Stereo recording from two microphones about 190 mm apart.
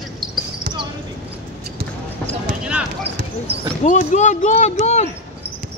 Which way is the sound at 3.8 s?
40° left (ahead or behind).